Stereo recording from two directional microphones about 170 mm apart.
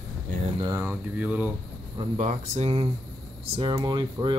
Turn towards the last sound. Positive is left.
turn(degrees=-25)  # may be behind; listen again after turning